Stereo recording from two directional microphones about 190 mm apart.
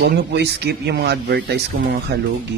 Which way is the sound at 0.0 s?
60° right (ahead or behind).